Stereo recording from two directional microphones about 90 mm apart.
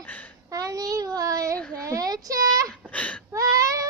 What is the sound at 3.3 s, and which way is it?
Baby cry, 40° right (ahead or behind).